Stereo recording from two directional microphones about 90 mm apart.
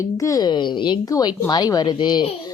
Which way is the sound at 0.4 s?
60° left (ahead or behind).